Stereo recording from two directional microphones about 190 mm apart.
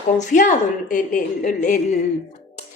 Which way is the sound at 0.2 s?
40° left (ahead or behind).